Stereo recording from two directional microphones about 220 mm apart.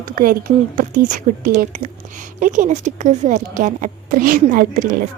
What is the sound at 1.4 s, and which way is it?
A woman's voice, 40° right (ahead or behind).